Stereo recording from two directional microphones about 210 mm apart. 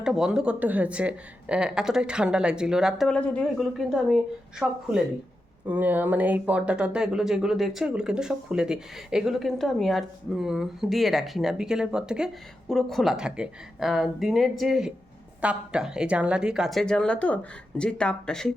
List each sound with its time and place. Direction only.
0.0 s speech: 5° right (ahead or behind)